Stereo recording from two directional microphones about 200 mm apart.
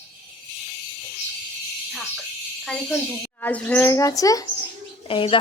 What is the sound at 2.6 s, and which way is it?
A woman's voice, 5° left (ahead or behind).